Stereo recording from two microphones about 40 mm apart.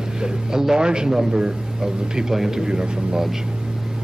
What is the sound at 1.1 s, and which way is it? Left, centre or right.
A man's voice, centre.